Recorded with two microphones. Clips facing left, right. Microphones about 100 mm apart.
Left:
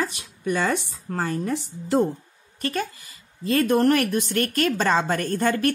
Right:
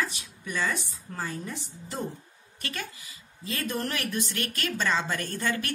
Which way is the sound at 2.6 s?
40° left (ahead or behind).